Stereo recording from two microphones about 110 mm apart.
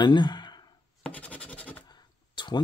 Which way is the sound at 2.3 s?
45° left (ahead or behind).